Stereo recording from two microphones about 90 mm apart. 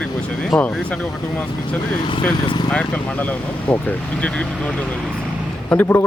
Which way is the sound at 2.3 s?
50° left (ahead or behind).